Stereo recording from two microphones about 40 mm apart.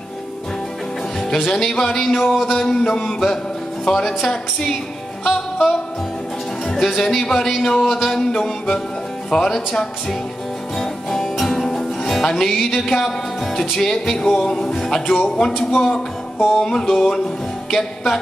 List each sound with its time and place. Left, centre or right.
1.3 s music: centre
6.7 s speech: centre
7.4 s music: centre